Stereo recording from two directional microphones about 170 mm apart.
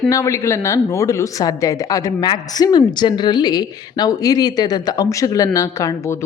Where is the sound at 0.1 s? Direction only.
20° left (ahead or behind).